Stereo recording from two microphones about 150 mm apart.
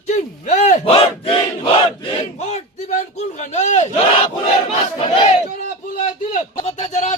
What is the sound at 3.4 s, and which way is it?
Speech, 50° left (ahead or behind).